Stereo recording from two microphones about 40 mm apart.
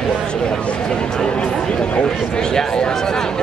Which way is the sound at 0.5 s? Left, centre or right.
Left.